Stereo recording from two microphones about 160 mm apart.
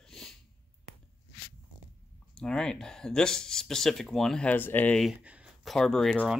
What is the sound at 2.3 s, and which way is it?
Speech, 5° left (ahead or behind).